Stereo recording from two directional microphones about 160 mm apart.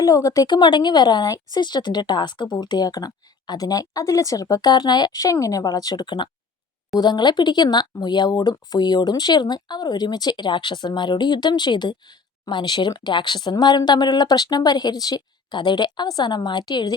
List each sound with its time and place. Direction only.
0.0 s speech: 20° left (ahead or behind)